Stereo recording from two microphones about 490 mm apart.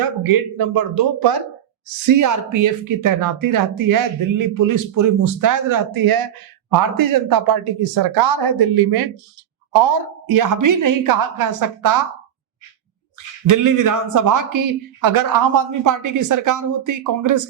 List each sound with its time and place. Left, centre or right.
0.2 s speech: right
13.1 s speech: right